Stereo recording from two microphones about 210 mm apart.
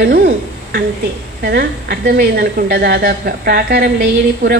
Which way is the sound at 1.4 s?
45° right (ahead or behind).